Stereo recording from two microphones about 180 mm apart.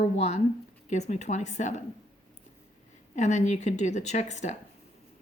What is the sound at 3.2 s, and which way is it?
Speech, 40° left (ahead or behind).